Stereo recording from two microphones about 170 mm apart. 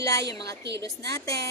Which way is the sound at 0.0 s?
20° left (ahead or behind).